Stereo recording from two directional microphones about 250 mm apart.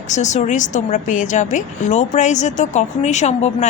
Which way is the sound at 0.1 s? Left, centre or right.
Left.